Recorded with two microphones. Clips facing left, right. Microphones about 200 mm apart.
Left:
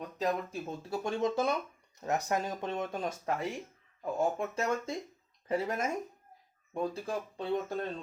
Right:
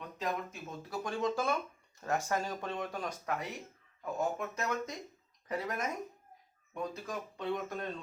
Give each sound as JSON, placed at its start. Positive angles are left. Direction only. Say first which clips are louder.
{"t": 0.2, "sound": "speech", "louder": "left 5 dB", "side_deg": 30}